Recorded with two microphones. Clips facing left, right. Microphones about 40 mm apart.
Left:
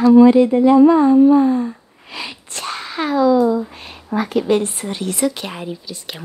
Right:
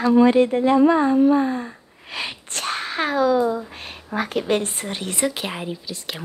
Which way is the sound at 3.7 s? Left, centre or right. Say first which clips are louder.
Left 4 dB; right.